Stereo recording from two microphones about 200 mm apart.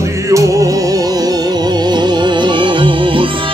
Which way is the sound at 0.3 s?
15° right (ahead or behind).